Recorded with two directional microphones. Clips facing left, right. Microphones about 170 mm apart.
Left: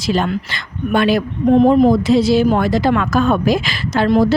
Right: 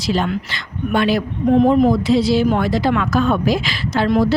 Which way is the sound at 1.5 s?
35° left (ahead or behind).